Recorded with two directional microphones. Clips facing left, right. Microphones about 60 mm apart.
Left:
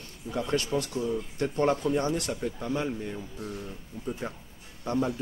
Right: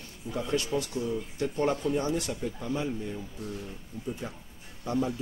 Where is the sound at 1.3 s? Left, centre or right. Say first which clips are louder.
Left 2 dB; left.